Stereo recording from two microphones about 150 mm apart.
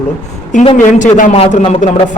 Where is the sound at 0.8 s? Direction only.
60° left (ahead or behind).